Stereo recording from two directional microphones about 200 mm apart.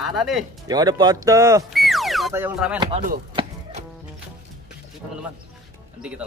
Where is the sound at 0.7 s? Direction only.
20° right (ahead or behind).